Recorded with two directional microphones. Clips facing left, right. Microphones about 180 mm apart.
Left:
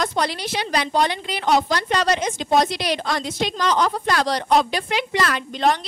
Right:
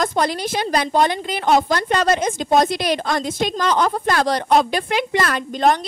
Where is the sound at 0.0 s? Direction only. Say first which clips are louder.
Right 3 dB; 50° right (ahead or behind).